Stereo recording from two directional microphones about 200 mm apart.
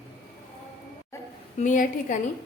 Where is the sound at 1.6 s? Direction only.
40° left (ahead or behind).